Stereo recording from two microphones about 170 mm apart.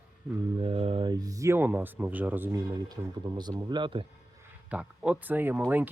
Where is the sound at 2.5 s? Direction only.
25° right (ahead or behind).